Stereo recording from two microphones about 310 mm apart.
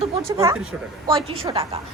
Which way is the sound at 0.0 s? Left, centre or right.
Centre.